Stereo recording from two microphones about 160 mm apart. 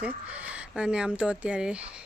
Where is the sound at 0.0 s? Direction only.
10° right (ahead or behind).